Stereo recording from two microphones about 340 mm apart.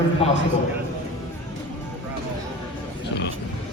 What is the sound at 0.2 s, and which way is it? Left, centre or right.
Speech, centre.